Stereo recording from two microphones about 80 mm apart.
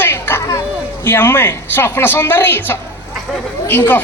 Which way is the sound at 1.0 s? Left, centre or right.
Left.